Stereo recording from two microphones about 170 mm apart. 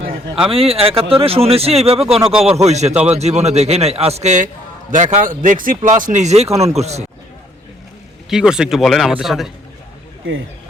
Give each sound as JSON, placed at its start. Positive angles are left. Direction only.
{"t": 0.5, "sound": "a man's voice", "side_deg": -35}
{"t": 2.3, "sound": "speech", "side_deg": -5}
{"t": 2.6, "sound": "a man's voice", "side_deg": -40}
{"t": 2.9, "sound": "speech", "side_deg": -5}
{"t": 3.2, "sound": "a man's voice", "side_deg": -40}
{"t": 8.3, "sound": "speech", "side_deg": -5}